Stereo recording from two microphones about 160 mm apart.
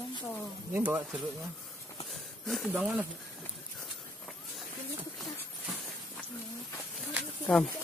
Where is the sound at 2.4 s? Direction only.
Centre (ahead or behind).